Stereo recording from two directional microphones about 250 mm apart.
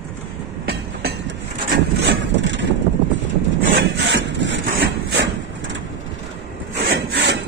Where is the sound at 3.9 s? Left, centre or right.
Right.